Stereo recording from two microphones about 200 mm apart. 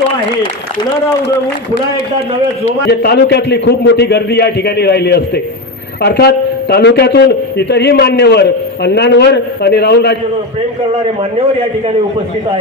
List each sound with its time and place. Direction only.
2.9 s a man's voice: 50° left (ahead or behind)
11.0 s a man's voice: 30° right (ahead or behind)